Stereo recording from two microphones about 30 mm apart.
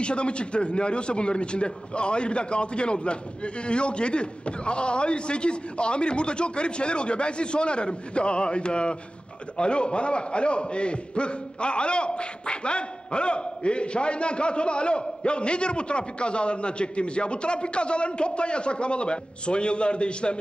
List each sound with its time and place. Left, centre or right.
0.0 s a man's voice: left